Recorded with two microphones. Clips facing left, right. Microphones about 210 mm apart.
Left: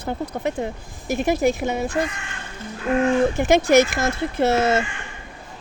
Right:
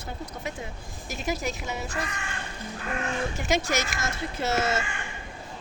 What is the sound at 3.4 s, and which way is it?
Speech, 55° left (ahead or behind).